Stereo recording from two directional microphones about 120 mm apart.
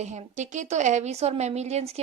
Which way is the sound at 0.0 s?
70° right (ahead or behind).